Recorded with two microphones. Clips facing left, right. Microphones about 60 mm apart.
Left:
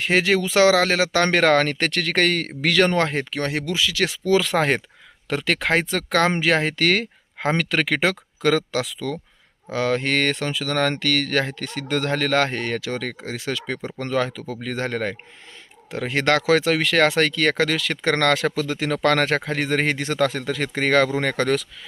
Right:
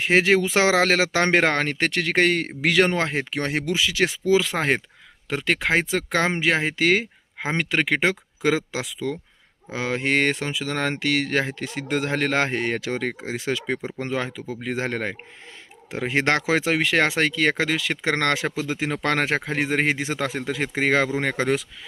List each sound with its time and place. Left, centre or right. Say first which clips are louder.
0.0 s speech: right 1 dB; right
3.2 s speech: even; right
4.3 s speech: left 2 dB; centre